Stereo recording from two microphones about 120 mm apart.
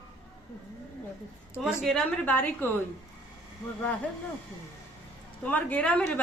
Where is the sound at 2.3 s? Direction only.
15° left (ahead or behind).